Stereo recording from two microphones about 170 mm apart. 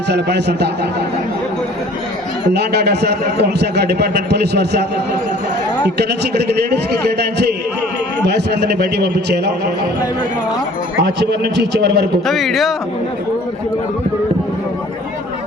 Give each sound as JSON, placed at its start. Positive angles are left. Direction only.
{"t": 0.1, "sound": "a man's voice", "side_deg": -80}
{"t": 2.5, "sound": "a man's voice", "side_deg": -75}
{"t": 6.0, "sound": "a man's voice", "side_deg": -75}
{"t": 11.0, "sound": "a man's voice", "side_deg": -80}
{"t": 12.2, "sound": "speech", "side_deg": 0}